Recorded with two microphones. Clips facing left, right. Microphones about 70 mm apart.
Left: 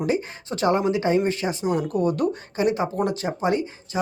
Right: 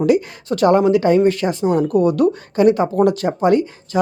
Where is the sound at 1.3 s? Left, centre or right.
Right.